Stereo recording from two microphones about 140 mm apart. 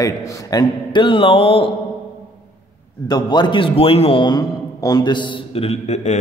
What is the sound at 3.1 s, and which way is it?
A man's voice, 30° left (ahead or behind).